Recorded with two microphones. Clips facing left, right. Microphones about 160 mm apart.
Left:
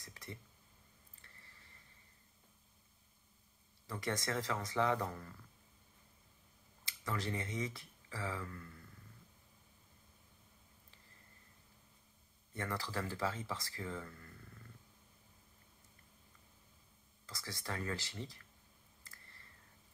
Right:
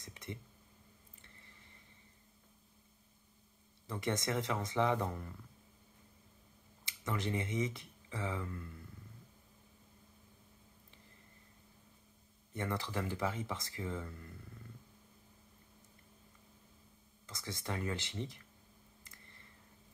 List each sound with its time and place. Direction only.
0.0 s a sound: 20° right (ahead or behind)
3.8 s speech: 20° right (ahead or behind)
6.8 s speech: 20° right (ahead or behind)
12.5 s speech: 20° right (ahead or behind)
17.3 s speech: 20° right (ahead or behind)
19.0 s a sound: 20° right (ahead or behind)